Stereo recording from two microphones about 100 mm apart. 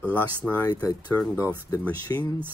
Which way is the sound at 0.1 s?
15° left (ahead or behind).